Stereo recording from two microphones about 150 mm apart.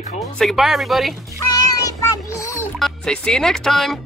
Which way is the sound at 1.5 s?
20° left (ahead or behind).